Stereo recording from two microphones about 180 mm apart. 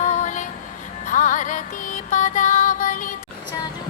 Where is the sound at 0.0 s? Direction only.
45° left (ahead or behind).